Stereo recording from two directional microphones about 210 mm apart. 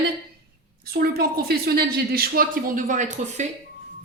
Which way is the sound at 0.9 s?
45° right (ahead or behind).